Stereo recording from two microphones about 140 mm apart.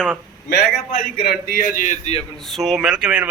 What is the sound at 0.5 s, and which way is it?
Speech, 90° left.